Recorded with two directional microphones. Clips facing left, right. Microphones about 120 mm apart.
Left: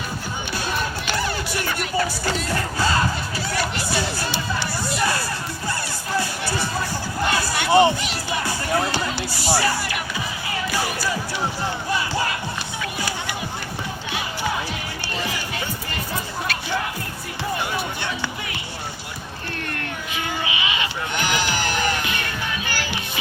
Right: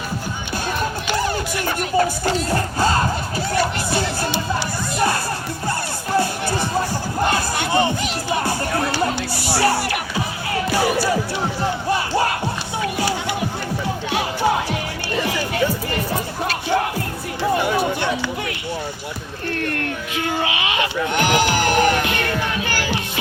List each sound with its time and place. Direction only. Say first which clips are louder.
1.0 s music: right 4 dB; 20° right (ahead or behind)
1.6 s chatter: right 6 dB; 40° right (ahead or behind)
2.7 s crowd: right 2 dB; 45° right (ahead or behind)
4.9 s music: right 5 dB; 50° right (ahead or behind)
7.7 s run: left 5 dB; 15° left (ahead or behind)
8.0 s music: right 4 dB; 45° right (ahead or behind)
9.6 s music: right 9 dB; 65° right (ahead or behind)
11.9 s crowd: right 4 dB; 50° right (ahead or behind)
16.5 s music: right 7 dB; 50° right (ahead or behind)
19.6 s a sound: right 5 dB; 60° right (ahead or behind)